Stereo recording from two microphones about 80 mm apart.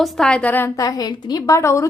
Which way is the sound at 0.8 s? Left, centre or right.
Left.